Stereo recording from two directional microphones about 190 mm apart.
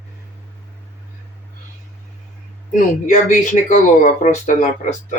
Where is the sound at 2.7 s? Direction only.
40° left (ahead or behind).